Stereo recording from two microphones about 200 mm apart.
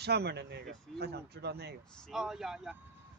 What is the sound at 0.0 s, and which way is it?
Speech, 55° right (ahead or behind).